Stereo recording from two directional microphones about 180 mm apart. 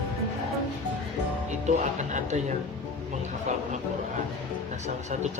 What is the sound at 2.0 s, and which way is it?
Speech, 40° right (ahead or behind).